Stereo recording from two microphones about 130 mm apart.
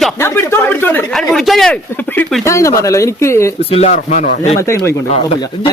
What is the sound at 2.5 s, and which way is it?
Speech, 25° left (ahead or behind).